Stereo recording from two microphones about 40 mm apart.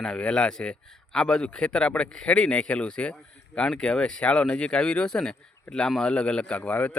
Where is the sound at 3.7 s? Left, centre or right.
Centre; by 6.9 s left.